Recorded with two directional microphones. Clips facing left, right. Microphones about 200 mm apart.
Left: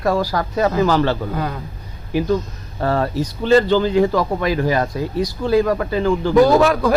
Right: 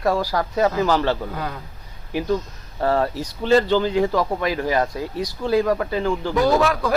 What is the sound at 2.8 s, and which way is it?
Speech, 10° right (ahead or behind).